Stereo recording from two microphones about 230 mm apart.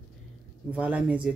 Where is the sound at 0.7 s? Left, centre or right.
Centre.